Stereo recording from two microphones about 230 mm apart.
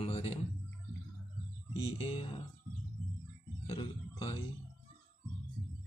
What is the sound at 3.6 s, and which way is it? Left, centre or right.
Music, left.